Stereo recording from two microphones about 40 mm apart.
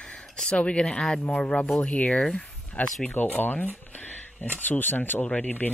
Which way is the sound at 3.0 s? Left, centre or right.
Left.